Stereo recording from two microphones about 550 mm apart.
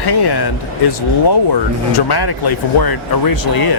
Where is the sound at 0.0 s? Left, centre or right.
Left.